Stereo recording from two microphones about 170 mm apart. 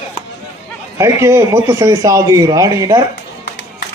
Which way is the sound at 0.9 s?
15° right (ahead or behind).